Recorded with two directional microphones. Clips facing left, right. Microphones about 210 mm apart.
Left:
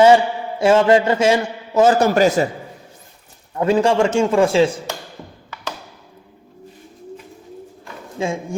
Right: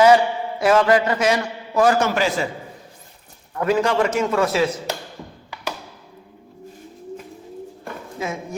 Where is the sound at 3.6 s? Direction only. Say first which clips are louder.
Left 3 dB; 30° left (ahead or behind).